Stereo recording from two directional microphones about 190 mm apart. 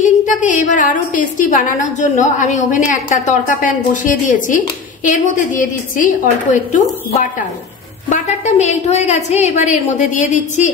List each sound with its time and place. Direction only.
0.0 s a woman's voice: 40° left (ahead or behind)